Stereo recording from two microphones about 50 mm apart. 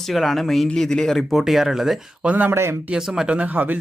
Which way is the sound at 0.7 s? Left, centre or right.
Centre.